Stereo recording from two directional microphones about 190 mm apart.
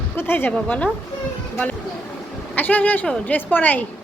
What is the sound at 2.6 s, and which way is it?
Speech, 10° left (ahead or behind).